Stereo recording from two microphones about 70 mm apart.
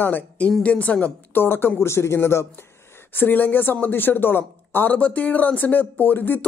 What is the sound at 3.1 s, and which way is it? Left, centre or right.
Speech, left.